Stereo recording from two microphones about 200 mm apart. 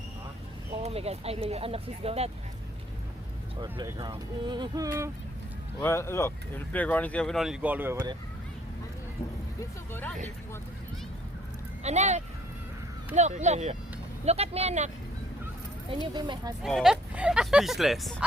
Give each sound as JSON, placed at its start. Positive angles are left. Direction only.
{"t": 0.8, "sound": "speech", "side_deg": -30}
{"t": 3.6, "sound": "speech", "side_deg": -20}
{"t": 5.8, "sound": "speech", "side_deg": 15}
{"t": 9.6, "sound": "speech", "side_deg": 10}
{"t": 11.8, "sound": "speech", "side_deg": -35}
{"t": 16.1, "sound": "speech", "side_deg": -20}
{"t": 16.6, "sound": "speech", "side_deg": 0}